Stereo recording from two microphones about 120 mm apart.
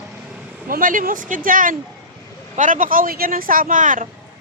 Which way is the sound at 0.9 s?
90° right.